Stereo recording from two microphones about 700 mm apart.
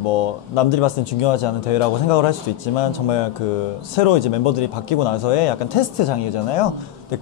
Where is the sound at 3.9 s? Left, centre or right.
Left.